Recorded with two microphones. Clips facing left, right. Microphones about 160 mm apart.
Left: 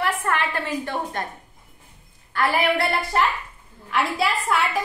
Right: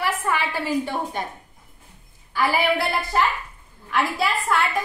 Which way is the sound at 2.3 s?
Centre (ahead or behind).